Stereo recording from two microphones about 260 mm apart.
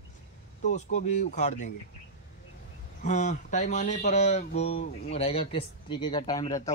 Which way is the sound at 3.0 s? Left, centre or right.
Left.